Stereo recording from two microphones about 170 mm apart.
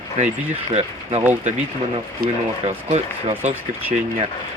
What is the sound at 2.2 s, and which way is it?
Speech, 60° right (ahead or behind).